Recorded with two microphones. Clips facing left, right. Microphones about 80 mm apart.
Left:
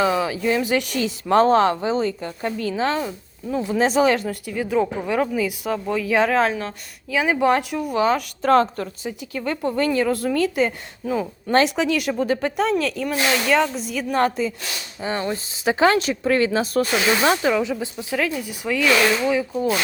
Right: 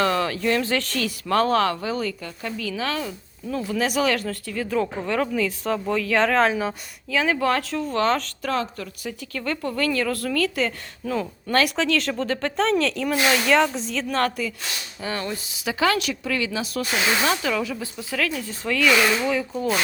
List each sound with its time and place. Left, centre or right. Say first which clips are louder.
0.0 s speech: left 2 dB; centre
7.1 s speech: left 3 dB; centre
8.4 s speech: left 9 dB; left
9.0 s speech: even; centre; by 17.3 s left
17.4 s speech: left 5 dB; left; by 19.8 s centre